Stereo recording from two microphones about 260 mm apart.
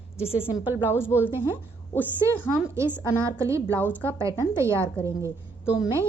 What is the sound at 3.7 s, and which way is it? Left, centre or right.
Speech, centre.